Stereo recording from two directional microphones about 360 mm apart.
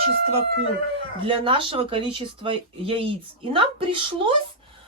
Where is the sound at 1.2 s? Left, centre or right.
Centre.